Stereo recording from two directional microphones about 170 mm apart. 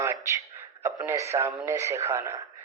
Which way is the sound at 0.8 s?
20° right (ahead or behind).